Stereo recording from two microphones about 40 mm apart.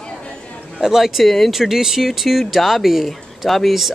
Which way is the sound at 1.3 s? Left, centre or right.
Centre.